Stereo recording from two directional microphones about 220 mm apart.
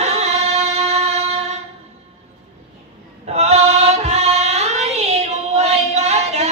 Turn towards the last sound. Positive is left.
turn(degrees=-30)  # may be behind; listen again after turning